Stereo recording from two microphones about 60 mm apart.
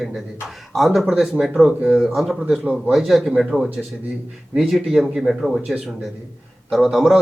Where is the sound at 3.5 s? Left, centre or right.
Left.